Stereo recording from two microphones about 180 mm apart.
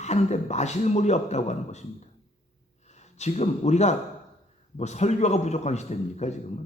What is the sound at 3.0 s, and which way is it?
Speech, 40° left (ahead or behind).